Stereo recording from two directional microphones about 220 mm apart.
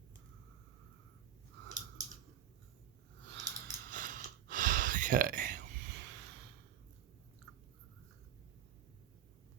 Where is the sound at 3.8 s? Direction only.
40° right (ahead or behind).